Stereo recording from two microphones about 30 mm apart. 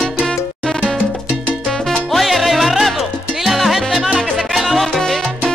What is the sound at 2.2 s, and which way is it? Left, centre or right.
Music, centre.